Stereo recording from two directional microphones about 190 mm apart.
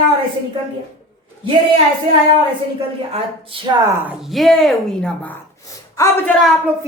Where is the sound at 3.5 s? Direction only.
25° right (ahead or behind).